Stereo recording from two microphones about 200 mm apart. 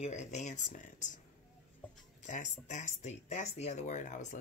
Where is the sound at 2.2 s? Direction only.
40° left (ahead or behind).